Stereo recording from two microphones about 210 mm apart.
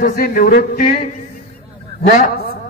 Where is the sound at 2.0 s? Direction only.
35° left (ahead or behind).